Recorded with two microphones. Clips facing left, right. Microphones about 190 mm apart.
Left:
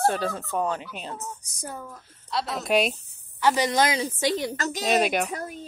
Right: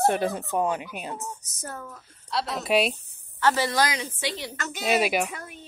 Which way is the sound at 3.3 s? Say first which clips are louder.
Left 1 dB; 15° left (ahead or behind).